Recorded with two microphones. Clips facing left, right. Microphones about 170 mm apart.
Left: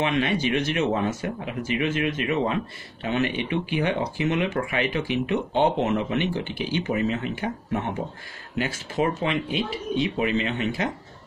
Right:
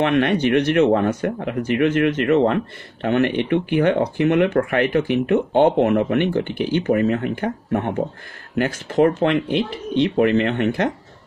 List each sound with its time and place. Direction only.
0.0 s speech: 60° right (ahead or behind)